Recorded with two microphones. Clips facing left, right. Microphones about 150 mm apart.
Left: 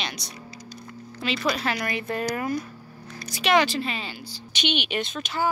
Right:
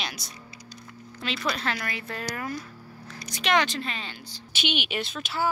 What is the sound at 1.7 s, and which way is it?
Speech, 20° left (ahead or behind).